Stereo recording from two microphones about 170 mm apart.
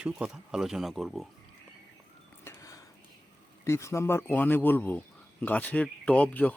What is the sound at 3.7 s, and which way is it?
Speech, 15° left (ahead or behind).